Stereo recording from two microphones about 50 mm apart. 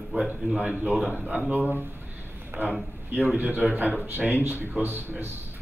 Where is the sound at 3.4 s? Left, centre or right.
Right.